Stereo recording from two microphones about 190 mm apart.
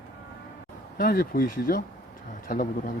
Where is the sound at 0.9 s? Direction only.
50° left (ahead or behind).